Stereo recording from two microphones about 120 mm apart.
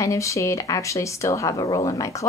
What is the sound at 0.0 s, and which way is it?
Speech, 25° left (ahead or behind).